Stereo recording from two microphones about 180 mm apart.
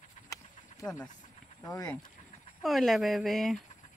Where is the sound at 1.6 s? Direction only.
20° left (ahead or behind).